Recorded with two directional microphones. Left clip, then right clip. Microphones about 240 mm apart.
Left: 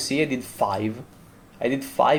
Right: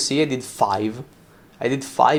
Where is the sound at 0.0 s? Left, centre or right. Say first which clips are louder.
Right 3 dB; right.